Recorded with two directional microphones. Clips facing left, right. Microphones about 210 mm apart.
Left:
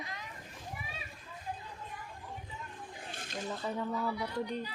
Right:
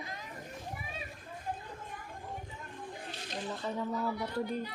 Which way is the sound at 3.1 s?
50° left (ahead or behind).